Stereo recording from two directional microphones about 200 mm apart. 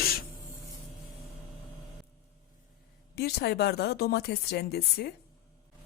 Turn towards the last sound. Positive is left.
turn(degrees=55)  # may be behind; listen again after turning